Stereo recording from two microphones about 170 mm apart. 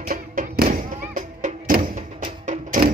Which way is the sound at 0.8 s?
55° right (ahead or behind).